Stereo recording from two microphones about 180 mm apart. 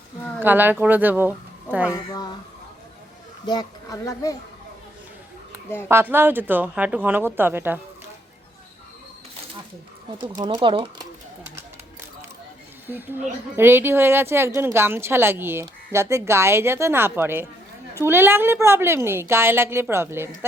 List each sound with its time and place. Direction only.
0.3 s a woman's voice: 10° right (ahead or behind)
1.9 s speech: 20° left (ahead or behind)
3.4 s speech: 25° left (ahead or behind)
5.9 s speech: 15° right (ahead or behind)
10.2 s speech: 25° right (ahead or behind)
12.9 s speech: 10° right (ahead or behind)